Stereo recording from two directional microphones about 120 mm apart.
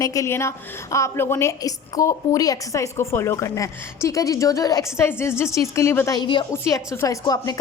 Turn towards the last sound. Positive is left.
turn(degrees=30)  # may be behind; listen again after turning